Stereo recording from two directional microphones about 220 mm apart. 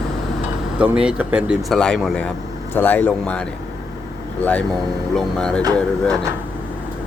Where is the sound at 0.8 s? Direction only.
5° right (ahead or behind).